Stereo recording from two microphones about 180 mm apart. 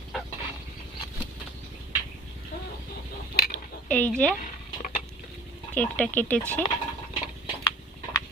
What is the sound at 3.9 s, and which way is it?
Speech, 5° left (ahead or behind).